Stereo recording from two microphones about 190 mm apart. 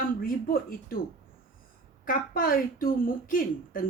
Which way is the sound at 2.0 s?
50° left (ahead or behind).